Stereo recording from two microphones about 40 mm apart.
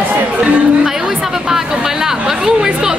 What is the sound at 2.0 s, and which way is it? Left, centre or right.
Speech, centre.